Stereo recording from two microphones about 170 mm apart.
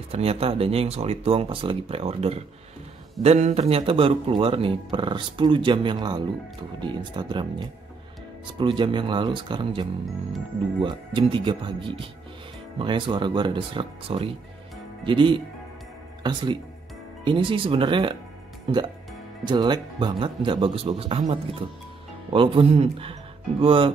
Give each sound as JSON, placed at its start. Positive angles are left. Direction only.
{"t": 0.1, "sound": "speech", "side_deg": -35}